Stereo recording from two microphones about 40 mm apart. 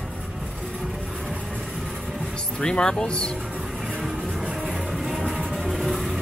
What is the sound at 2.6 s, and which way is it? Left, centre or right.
Speech, left.